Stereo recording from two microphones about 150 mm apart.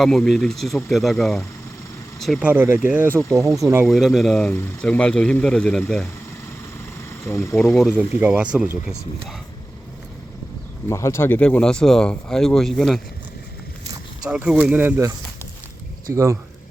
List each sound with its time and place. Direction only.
0.0 s speech: centre (ahead or behind)
2.1 s vehicle: centre (ahead or behind)
2.4 s speech: 10° right (ahead or behind)
3.8 s speech: centre (ahead or behind)
7.3 s speech: 15° left (ahead or behind)
7.6 s speech: centre (ahead or behind)
10.8 s speech: 20° left (ahead or behind); by 13.0 s 5° left (ahead or behind)
14.2 s speech: 5° right (ahead or behind)
16.1 s speech: 20° right (ahead or behind)